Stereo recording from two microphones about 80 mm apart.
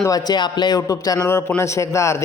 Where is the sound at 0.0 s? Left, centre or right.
Left.